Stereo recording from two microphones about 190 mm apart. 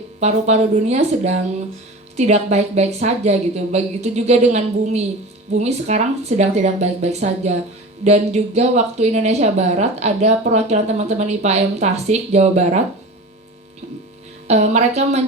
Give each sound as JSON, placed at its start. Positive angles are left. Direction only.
{"t": 0.2, "sound": "a woman's voice", "side_deg": -35}
{"t": 14.4, "sound": "a woman's voice", "side_deg": -35}